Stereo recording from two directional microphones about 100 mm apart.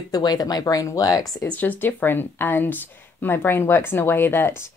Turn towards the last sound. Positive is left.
turn(degrees=20)  # may be behind; listen again after turning